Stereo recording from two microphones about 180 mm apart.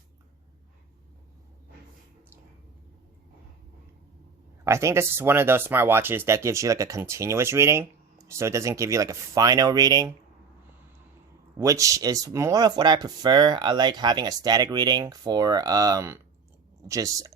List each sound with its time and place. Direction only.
4.6 s speech: 15° right (ahead or behind)
11.5 s speech: 20° right (ahead or behind)